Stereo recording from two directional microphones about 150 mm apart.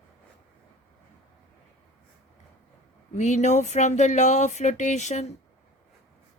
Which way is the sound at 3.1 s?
50° left (ahead or behind).